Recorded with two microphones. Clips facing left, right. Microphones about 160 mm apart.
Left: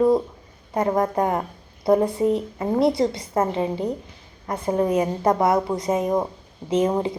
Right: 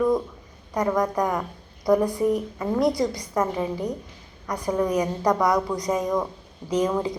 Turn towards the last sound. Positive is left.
turn(degrees=25)  # may be behind; listen again after turning